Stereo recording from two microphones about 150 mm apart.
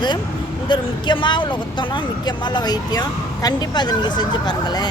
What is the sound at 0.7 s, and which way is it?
Speech, 30° left (ahead or behind).